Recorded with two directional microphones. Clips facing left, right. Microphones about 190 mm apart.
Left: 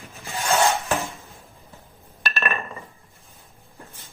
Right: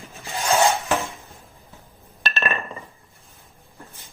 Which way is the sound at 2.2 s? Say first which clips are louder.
Right 1 dB; 25° right (ahead or behind).